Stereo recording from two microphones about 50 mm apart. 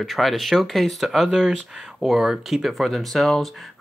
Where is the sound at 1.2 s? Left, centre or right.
Centre.